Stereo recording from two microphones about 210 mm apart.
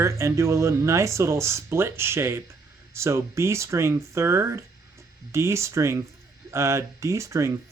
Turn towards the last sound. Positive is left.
turn(degrees=-15)  # may be behind; listen again after turning